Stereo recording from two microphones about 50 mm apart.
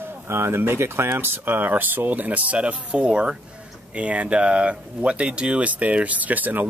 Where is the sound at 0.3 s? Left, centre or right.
Right.